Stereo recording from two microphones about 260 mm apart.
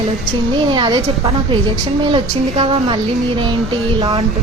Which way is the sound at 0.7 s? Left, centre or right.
Centre.